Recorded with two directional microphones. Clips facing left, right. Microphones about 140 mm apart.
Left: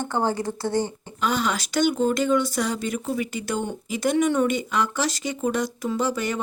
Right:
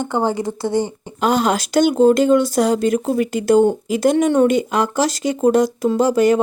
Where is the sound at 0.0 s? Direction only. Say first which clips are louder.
Right 5 dB; 15° right (ahead or behind).